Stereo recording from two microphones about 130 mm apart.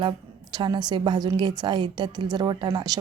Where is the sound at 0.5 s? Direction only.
35° right (ahead or behind).